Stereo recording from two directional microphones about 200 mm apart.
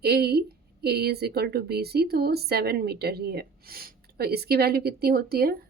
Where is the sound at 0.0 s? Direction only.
55° right (ahead or behind).